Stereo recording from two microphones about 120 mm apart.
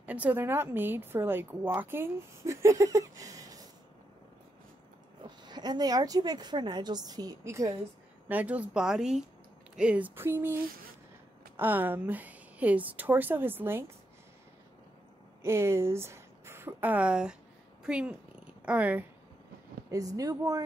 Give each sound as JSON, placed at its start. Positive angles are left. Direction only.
{"t": 0.0, "sound": "speech", "side_deg": -10}
{"t": 5.2, "sound": "a woman's voice", "side_deg": -40}
{"t": 8.3, "sound": "a woman's voice", "side_deg": -10}
{"t": 15.4, "sound": "a woman's voice", "side_deg": -20}
{"t": 20.2, "sound": "speech", "side_deg": -30}